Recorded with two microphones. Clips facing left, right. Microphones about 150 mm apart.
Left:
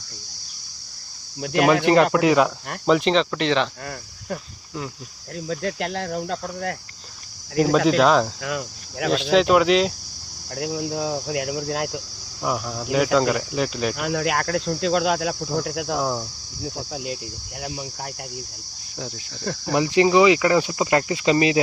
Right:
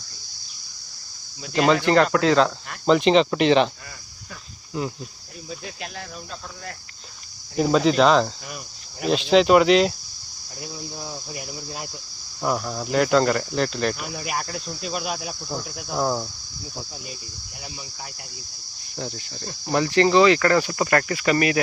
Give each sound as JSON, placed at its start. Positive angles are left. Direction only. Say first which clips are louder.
{"t": 1.6, "sound": "speech", "louder": "left 1 dB", "side_deg": 15}
{"t": 2.8, "sound": "speech", "louder": "right 2 dB", "side_deg": 0}
{"t": 3.2, "sound": "speech", "louder": "right 4 dB", "side_deg": -15}
{"t": 5.5, "sound": "speech", "louder": "left 10 dB", "side_deg": 70}
{"t": 7.9, "sound": "speech", "louder": "right 2 dB", "side_deg": 5}
{"t": 8.4, "sound": "speech", "louder": "left 10 dB", "side_deg": 90}
{"t": 9.3, "sound": "speech", "louder": "right 2 dB", "side_deg": 0}
{"t": 10.5, "sound": "cricket", "louder": "left 10 dB", "side_deg": 75}
{"t": 12.4, "sound": "speech", "louder": "right 1 dB", "side_deg": 0}
{"t": 13.9, "sound": "cricket", "louder": "left 7 dB", "side_deg": 80}
{"t": 16.0, "sound": "speech", "louder": "right 4 dB", "side_deg": -5}
{"t": 16.6, "sound": "speech", "louder": "left 8 dB", "side_deg": 75}
{"t": 17.6, "sound": "cricket", "louder": "left 7 dB", "side_deg": 60}
{"t": 19.7, "sound": "speech", "louder": "left 1 dB", "side_deg": 15}